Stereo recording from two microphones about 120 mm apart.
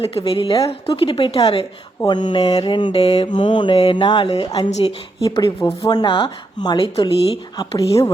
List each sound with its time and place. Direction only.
0.0 s mantra: 50° left (ahead or behind)
5.2 s speech: 30° left (ahead or behind)
5.5 s speech: 45° left (ahead or behind)